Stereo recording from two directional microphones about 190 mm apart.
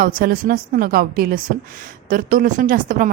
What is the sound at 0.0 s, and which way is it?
A woman's voice, 50° right (ahead or behind).